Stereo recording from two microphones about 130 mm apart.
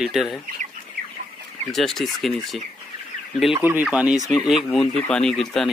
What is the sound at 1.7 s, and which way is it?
Speech, 5° left (ahead or behind).